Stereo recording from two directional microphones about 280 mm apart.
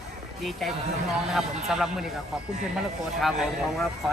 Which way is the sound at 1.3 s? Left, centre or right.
Centre.